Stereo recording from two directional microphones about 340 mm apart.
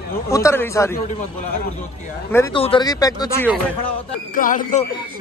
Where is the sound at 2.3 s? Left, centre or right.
Centre.